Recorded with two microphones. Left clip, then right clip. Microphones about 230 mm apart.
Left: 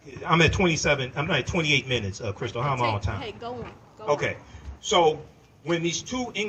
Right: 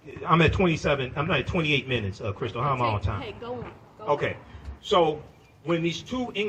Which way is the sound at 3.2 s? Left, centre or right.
Left.